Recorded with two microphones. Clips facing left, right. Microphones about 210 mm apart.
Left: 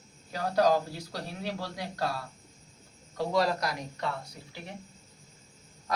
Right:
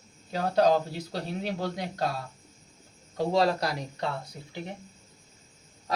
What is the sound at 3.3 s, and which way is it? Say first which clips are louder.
Speech: right 2 dB; 30° right (ahead or behind).